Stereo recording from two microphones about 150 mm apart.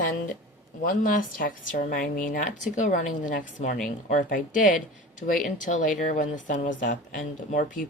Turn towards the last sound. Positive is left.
turn(degrees=60)  # may be behind; listen again after turning